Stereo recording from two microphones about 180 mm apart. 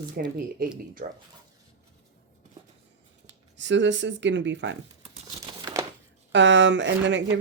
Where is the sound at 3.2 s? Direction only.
90° right.